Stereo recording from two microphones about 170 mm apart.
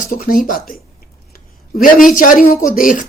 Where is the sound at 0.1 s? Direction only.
60° left (ahead or behind).